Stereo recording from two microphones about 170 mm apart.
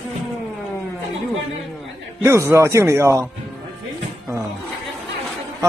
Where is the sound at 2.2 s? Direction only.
15° right (ahead or behind).